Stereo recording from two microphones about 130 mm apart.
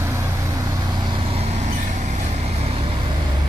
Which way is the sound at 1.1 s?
45° right (ahead or behind).